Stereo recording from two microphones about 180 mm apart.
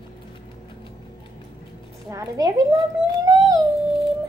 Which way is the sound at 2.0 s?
20° right (ahead or behind).